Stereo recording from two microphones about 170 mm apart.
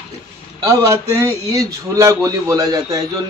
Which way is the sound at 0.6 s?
20° right (ahead or behind).